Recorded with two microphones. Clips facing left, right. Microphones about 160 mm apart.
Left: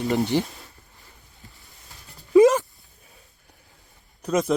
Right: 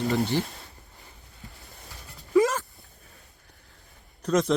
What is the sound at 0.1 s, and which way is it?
Speech, 15° left (ahead or behind).